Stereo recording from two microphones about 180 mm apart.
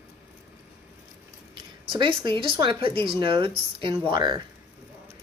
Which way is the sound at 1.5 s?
25° right (ahead or behind).